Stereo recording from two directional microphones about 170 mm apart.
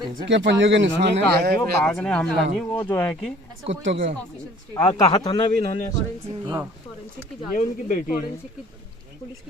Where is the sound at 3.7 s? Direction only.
90° right.